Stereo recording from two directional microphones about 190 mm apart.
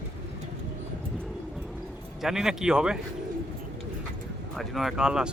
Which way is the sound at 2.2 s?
Centre (ahead or behind).